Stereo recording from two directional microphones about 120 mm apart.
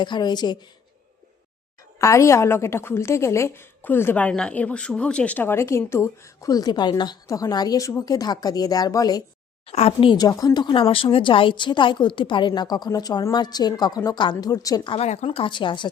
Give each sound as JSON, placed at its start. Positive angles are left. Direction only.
{"t": 0.0, "sound": "a woman's voice", "side_deg": 40}
{"t": 2.0, "sound": "a woman's voice", "side_deg": 25}
{"t": 9.6, "sound": "speech", "side_deg": 55}
{"t": 10.1, "sound": "a woman's voice", "side_deg": 30}
{"t": 14.8, "sound": "speech", "side_deg": 60}